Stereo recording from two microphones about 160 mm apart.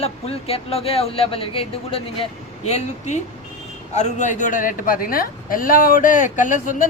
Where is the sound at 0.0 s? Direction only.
35° left (ahead or behind).